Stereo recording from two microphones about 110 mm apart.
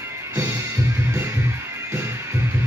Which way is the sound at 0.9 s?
20° right (ahead or behind).